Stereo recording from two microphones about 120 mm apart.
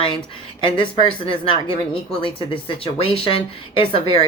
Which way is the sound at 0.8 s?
45° left (ahead or behind).